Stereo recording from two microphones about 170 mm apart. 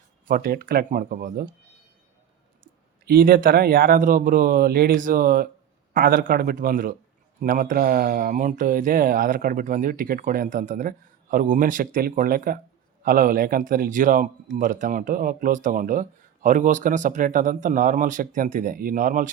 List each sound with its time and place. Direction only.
0.3 s speech: 55° right (ahead or behind)
3.1 s speech: 60° right (ahead or behind)